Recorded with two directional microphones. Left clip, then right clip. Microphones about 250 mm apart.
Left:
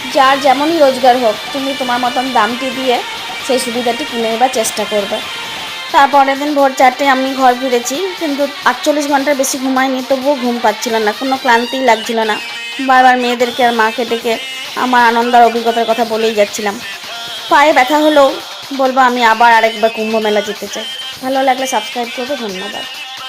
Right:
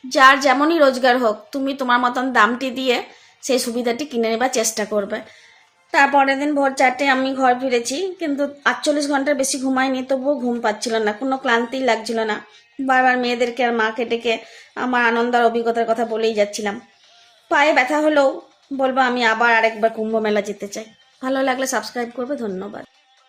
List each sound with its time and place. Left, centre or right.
0.1 s a woman's voice: centre
4.4 s a woman's voice: centre
5.9 s a woman's voice: centre